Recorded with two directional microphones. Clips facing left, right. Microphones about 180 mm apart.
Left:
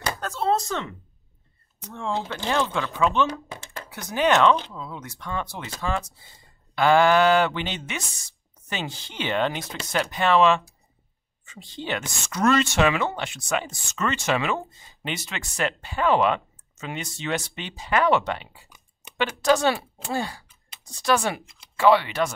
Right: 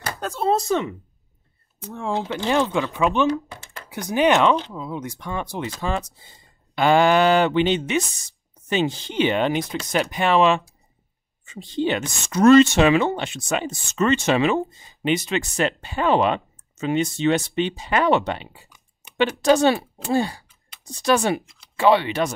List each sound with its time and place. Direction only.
0.2 s speech: 15° right (ahead or behind)
2.0 s speech: 15° right (ahead or behind)